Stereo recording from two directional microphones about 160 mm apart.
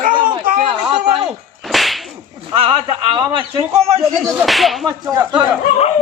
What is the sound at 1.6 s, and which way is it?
Whip, centre (ahead or behind).